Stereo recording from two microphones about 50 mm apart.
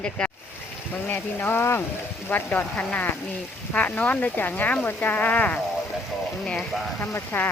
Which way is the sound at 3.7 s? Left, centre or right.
Left.